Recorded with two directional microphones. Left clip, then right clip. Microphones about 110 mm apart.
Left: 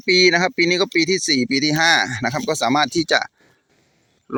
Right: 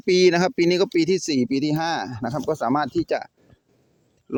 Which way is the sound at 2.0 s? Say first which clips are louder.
Left 4 dB; 30° left (ahead or behind).